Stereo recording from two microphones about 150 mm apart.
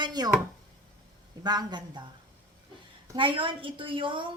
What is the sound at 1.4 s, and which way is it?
Speech, 25° right (ahead or behind).